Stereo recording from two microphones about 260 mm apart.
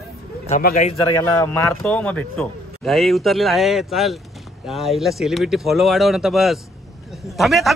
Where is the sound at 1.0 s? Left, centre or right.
Centre.